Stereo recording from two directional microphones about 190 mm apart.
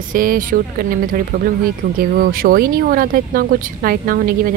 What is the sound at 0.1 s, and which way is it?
Speech, 45° right (ahead or behind).